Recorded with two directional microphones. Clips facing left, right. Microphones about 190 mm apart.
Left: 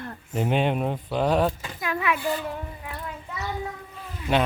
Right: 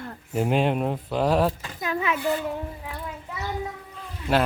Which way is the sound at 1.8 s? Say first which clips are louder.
Even; 25° right (ahead or behind).